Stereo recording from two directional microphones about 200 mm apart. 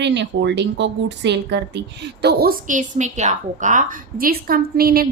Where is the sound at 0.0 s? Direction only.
60° right (ahead or behind).